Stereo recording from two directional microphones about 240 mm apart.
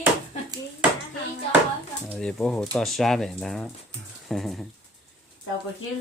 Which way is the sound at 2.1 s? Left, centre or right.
Centre.